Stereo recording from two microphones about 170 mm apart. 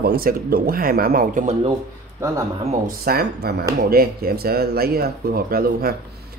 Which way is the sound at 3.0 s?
65° right (ahead or behind).